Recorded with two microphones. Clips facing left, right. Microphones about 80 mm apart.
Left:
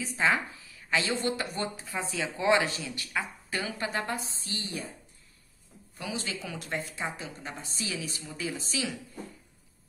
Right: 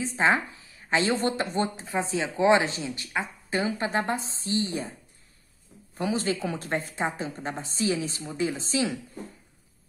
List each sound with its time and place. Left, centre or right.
0.0 s speech: right
5.9 s speech: right